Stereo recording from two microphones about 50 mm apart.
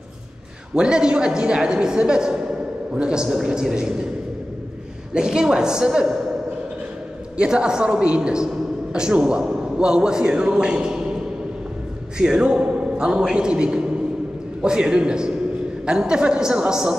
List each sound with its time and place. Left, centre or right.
0.7 s a man's voice: centre
5.1 s a man's voice: centre
7.3 s a woman's voice: centre